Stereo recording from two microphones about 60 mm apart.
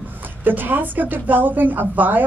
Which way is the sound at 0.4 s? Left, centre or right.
Right.